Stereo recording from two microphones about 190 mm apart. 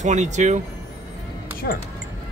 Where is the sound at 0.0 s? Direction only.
40° right (ahead or behind).